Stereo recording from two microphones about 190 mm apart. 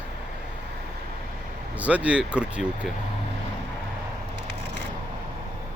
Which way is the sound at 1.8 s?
5° right (ahead or behind).